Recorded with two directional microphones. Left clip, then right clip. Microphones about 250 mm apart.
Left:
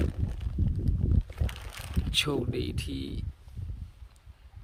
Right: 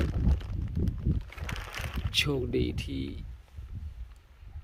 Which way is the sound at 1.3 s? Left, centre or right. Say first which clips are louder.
Right 3 dB; centre.